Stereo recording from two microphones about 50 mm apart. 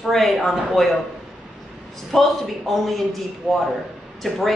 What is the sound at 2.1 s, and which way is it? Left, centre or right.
Speech, centre.